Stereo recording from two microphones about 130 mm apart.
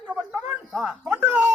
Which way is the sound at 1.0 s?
15° right (ahead or behind).